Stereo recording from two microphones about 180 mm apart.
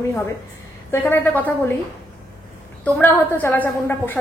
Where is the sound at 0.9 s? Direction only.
15° left (ahead or behind).